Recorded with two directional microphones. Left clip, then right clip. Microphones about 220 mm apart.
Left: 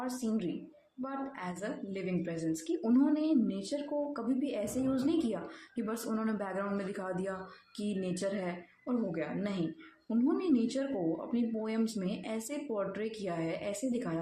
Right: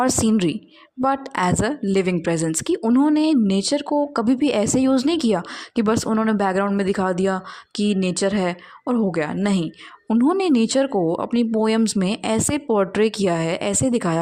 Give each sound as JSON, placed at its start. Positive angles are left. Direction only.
{"t": 0.0, "sound": "a woman's voice", "side_deg": -50}